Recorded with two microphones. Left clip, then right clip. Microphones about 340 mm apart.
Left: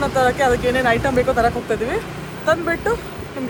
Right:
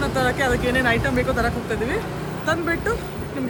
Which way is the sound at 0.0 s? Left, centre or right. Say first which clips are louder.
Left 5 dB; centre.